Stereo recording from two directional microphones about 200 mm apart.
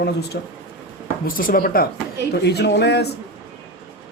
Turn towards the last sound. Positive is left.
turn(degrees=55)  # may be behind; listen again after turning